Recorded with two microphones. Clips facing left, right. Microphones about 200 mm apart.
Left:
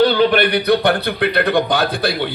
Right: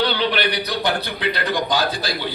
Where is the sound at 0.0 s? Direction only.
50° left (ahead or behind).